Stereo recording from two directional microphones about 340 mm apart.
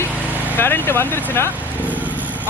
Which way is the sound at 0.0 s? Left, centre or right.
Centre.